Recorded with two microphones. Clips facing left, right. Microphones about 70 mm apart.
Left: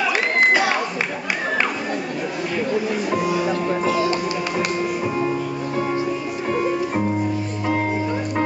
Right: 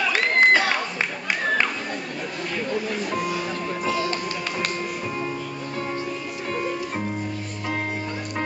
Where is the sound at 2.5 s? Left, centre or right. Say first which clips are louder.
Left 4 dB; centre.